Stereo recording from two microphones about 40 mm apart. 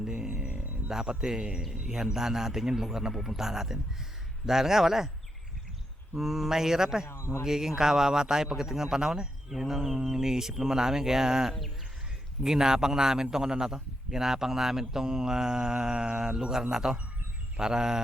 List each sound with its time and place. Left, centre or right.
0.0 s a sound: centre
0.5 s music: right
0.9 s a man's voice: centre
6.1 s a man's voice: centre